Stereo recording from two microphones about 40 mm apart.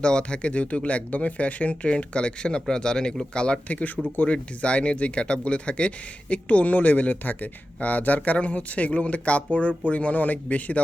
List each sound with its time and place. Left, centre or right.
0.0 s speech: left
3.7 s speech: left